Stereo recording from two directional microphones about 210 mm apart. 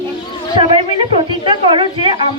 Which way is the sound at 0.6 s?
25° right (ahead or behind).